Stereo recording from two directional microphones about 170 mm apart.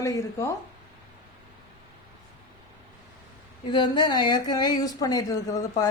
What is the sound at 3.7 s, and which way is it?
Speech, 25° left (ahead or behind).